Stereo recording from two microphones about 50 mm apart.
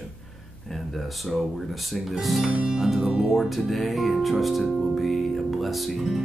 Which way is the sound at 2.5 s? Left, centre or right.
Right.